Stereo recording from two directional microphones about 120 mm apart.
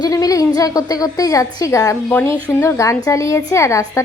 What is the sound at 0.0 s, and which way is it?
A woman's voice, 30° left (ahead or behind).